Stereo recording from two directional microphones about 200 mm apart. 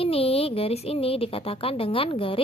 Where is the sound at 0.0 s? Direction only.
30° left (ahead or behind).